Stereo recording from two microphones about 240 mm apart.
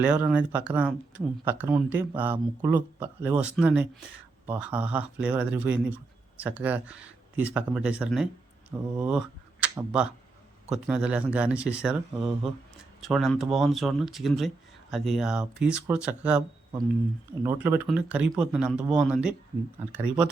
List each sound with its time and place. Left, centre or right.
0.0 s speech: centre
17.4 s speech: centre